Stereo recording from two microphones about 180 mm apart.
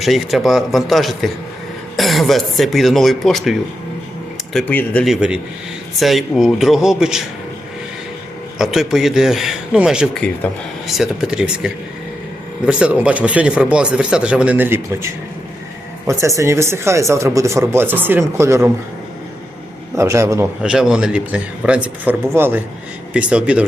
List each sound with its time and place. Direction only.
0.0 s speech: centre (ahead or behind)
4.5 s speech: 10° left (ahead or behind)
5.0 s speech: 5° right (ahead or behind)
8.5 s speech: 5° right (ahead or behind)
20.0 s speech: 15° right (ahead or behind)